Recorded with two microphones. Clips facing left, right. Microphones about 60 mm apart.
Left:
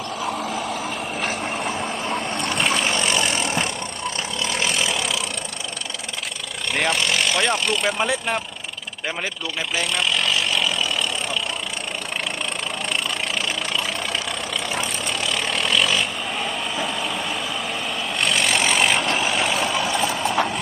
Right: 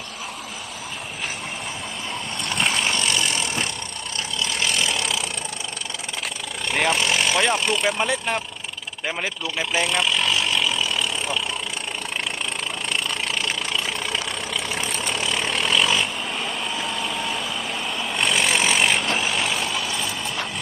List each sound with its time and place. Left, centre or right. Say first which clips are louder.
2.8 s vehicle: left 2 dB; left
3.3 s vehicle: left 3 dB; left
4.8 s vehicle: left 1 dB; centre
6.7 s speech: right 1 dB; centre
14.8 s vehicle: even; centre